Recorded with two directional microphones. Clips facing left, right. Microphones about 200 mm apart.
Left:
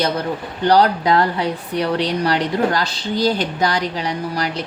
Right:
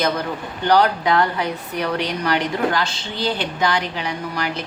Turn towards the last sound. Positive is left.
turn(degrees=35)  # may be behind; listen again after turning